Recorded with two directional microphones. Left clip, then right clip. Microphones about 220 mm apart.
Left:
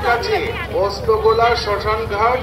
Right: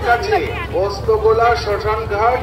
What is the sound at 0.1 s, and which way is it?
Speech, 45° right (ahead or behind).